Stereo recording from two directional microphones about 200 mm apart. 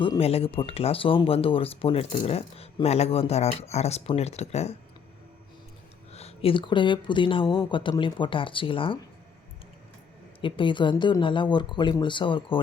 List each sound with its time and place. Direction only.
0.0 s speech: 30° left (ahead or behind)
6.1 s speech: 30° left (ahead or behind)
10.4 s speech: 25° left (ahead or behind)